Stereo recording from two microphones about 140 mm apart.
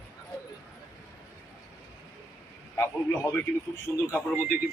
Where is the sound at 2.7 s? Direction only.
15° left (ahead or behind).